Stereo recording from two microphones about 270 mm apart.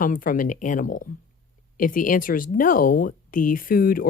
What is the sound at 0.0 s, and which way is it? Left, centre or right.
Speech, left.